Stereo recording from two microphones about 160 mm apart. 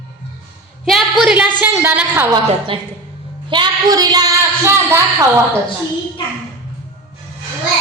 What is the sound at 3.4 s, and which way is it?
A woman's voice, 30° right (ahead or behind).